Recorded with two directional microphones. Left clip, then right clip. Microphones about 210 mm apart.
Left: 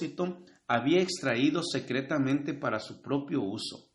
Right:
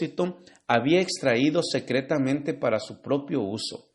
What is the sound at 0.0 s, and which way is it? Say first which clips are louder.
Speech: right 6 dB; 35° right (ahead or behind).